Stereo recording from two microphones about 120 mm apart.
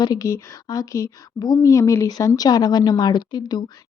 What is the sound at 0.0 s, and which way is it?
Speech, 30° left (ahead or behind).